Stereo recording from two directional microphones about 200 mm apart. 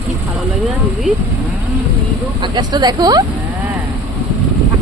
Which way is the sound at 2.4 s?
20° right (ahead or behind).